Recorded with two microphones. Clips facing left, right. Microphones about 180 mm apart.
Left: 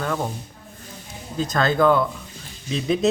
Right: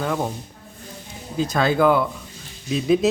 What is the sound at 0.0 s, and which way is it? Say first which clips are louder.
Speech: right 1 dB; 10° right (ahead or behind).